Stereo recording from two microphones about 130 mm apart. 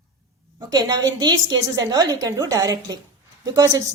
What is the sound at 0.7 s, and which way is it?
A woman's voice, 30° right (ahead or behind).